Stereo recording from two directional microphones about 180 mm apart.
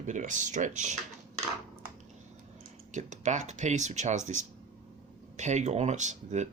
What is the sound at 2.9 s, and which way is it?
Speech, 40° right (ahead or behind).